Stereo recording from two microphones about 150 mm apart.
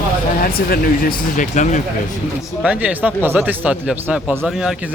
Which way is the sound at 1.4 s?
55° left (ahead or behind).